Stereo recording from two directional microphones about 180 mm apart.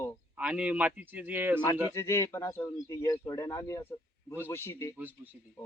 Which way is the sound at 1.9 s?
15° left (ahead or behind).